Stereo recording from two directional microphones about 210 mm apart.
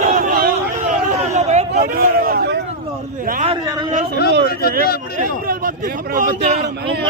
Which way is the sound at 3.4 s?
30° right (ahead or behind).